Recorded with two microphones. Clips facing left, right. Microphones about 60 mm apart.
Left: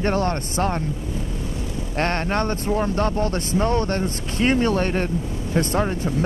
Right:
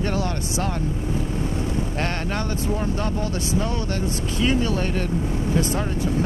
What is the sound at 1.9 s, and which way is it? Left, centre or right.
Speech, left.